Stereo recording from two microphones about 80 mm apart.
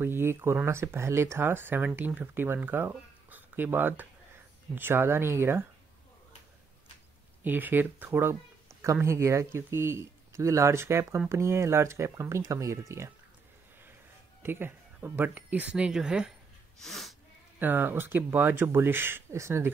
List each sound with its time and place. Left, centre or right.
0.0 s speech: right
7.4 s speech: right
14.4 s speech: right; by 16.3 s centre
16.8 s speech: centre
17.6 s speech: right